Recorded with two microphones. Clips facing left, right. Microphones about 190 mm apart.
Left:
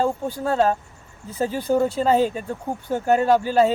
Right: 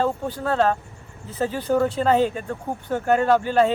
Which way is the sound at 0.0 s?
10° left (ahead or behind).